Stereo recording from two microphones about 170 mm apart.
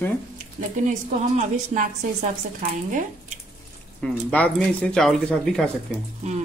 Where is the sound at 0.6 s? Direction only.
45° right (ahead or behind).